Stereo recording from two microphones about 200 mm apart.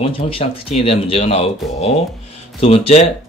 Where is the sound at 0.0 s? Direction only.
30° left (ahead or behind).